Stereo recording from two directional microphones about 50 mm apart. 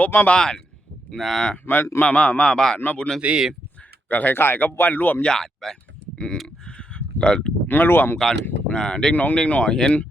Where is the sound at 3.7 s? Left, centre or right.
Left.